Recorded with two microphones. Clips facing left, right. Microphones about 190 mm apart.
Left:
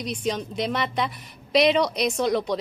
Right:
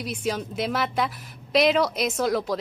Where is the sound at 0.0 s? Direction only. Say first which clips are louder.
Left 1 dB; 5° right (ahead or behind).